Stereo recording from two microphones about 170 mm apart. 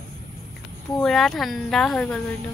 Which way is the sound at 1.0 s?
Centre (ahead or behind).